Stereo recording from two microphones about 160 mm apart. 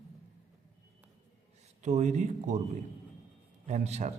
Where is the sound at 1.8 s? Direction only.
45° right (ahead or behind).